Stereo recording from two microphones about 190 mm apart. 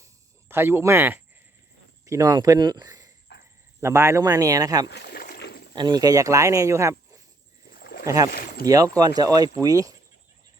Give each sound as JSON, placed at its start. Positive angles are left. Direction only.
{"t": 0.0, "sound": "a sound", "side_deg": -10}
{"t": 2.0, "sound": "speech", "side_deg": -15}
{"t": 3.3, "sound": "cricket", "side_deg": 60}
{"t": 3.8, "sound": "speech", "side_deg": -15}
{"t": 4.9, "sound": "rowboat", "side_deg": 55}
{"t": 5.7, "sound": "speech", "side_deg": -20}
{"t": 7.7, "sound": "a sound", "side_deg": 55}
{"t": 8.0, "sound": "speech", "side_deg": -20}
{"t": 8.3, "sound": "speech", "side_deg": 50}
{"t": 8.6, "sound": "speech", "side_deg": -20}